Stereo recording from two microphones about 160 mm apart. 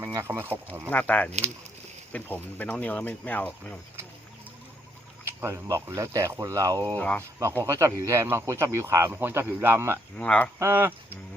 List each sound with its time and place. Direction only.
0.0 s speech: 20° right (ahead or behind)
0.9 s speech: 10° left (ahead or behind)
5.4 s speech: 15° right (ahead or behind)
6.9 s speech: 10° left (ahead or behind)
7.3 s speech: 20° right (ahead or behind)
10.2 s speech: 10° left (ahead or behind)
10.6 s speech: 15° right (ahead or behind)